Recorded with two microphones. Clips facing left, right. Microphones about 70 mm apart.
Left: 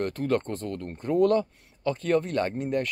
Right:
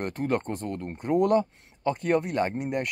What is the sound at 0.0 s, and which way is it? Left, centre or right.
Speech, centre.